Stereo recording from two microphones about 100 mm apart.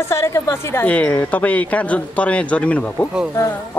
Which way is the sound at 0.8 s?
15° left (ahead or behind).